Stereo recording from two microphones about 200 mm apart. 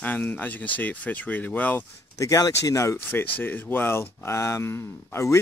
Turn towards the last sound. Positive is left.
turn(degrees=15)  # may be behind; listen again after turning